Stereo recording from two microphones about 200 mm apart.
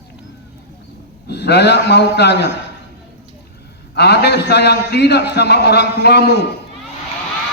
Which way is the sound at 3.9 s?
55° left (ahead or behind).